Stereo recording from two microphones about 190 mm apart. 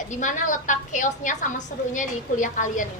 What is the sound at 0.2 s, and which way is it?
A woman's voice, 40° left (ahead or behind).